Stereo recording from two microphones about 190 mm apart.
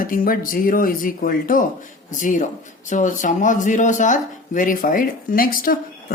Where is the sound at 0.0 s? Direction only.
45° left (ahead or behind).